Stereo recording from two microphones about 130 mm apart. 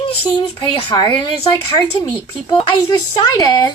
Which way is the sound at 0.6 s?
35° left (ahead or behind).